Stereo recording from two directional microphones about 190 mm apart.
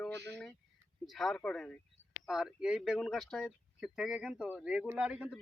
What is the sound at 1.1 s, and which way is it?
Speech, centre (ahead or behind).